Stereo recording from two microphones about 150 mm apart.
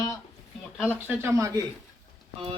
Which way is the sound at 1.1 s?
15° right (ahead or behind).